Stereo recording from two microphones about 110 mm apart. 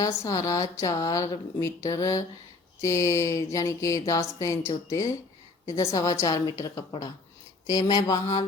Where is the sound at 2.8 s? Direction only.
30° left (ahead or behind).